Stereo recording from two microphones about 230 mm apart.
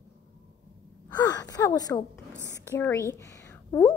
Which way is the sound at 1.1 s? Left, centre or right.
Centre.